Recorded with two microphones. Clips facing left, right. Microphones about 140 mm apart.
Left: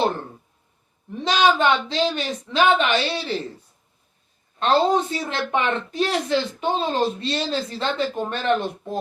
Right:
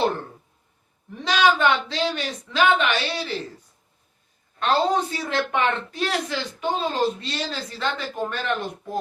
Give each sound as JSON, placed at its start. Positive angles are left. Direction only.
{"t": 1.2, "sound": "a woman's voice", "side_deg": 25}
{"t": 4.6, "sound": "a woman's voice", "side_deg": 25}